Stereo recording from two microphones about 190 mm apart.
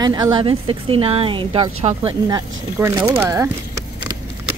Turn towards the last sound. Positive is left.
turn(degrees=-15)  # may be behind; listen again after turning